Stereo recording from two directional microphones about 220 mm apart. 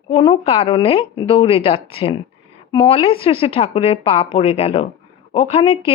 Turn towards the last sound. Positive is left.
turn(degrees=25)  # may be behind; listen again after turning